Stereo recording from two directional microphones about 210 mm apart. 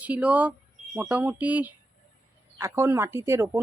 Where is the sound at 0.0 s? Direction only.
5° right (ahead or behind).